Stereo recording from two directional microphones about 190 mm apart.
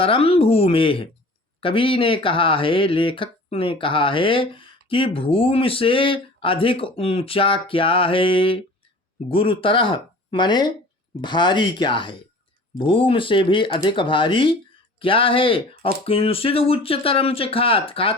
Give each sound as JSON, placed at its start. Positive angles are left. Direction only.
{"t": 0.0, "sound": "speech", "side_deg": 30}